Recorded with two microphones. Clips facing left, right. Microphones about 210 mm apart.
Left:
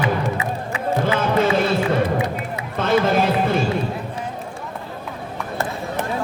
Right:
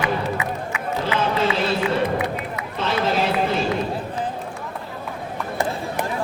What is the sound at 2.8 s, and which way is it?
Run, 50° left (ahead or behind).